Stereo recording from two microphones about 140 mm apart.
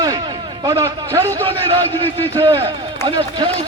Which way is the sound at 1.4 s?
40° right (ahead or behind).